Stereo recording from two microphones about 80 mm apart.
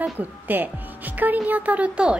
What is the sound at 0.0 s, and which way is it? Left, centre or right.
A woman's voice, right.